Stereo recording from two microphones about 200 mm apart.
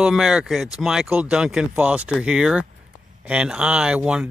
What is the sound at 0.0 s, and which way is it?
Speech, 5° right (ahead or behind).